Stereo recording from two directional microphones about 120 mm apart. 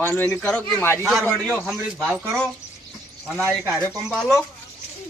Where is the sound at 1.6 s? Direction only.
Centre (ahead or behind).